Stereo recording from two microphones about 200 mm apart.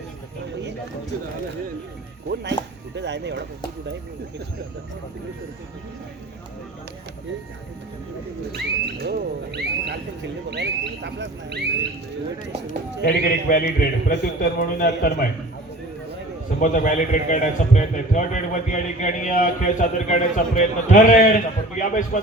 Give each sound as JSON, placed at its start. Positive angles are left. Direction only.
{"t": 2.3, "sound": "speech", "side_deg": -60}
{"t": 8.5, "sound": "speech", "side_deg": -55}
{"t": 12.6, "sound": "a man's voice", "side_deg": 45}
{"t": 16.6, "sound": "a man's voice", "side_deg": 40}